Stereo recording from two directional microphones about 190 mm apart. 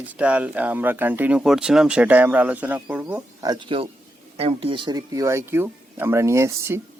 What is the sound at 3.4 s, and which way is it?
Speech, 25° right (ahead or behind).